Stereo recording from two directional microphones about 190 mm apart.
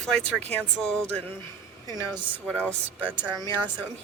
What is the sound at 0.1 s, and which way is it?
Speech, 5° left (ahead or behind).